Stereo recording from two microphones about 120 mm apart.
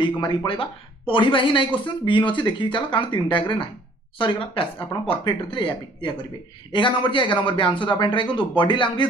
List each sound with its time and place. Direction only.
0.0 s a man's voice: 40° left (ahead or behind)